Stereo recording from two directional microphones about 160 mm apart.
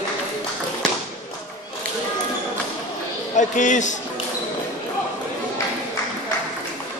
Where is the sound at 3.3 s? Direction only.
50° left (ahead or behind).